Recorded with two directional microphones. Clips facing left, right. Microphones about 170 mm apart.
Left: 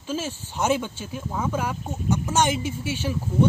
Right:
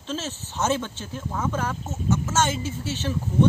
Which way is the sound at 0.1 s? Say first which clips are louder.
Left 2 dB; 10° left (ahead or behind).